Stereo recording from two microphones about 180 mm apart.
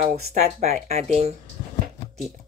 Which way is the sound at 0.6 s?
40° right (ahead or behind).